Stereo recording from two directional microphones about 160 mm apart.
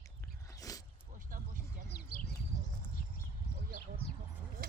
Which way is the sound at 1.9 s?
70° left (ahead or behind).